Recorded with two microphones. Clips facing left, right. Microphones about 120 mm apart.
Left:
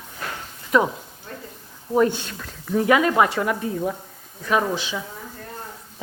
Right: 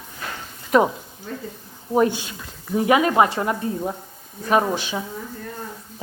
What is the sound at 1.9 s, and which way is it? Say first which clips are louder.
Speech: even; 15° right (ahead or behind).